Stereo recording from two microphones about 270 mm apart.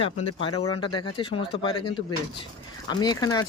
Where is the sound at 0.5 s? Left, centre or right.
Left.